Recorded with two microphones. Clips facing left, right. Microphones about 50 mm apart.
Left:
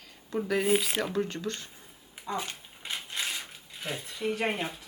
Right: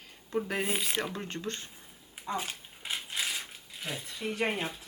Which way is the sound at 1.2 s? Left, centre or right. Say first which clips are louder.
Left 2 dB; right.